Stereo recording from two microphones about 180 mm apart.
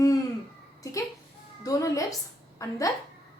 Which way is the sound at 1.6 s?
20° left (ahead or behind).